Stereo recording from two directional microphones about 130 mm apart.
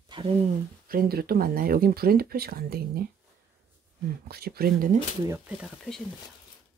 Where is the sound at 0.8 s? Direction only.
90° right.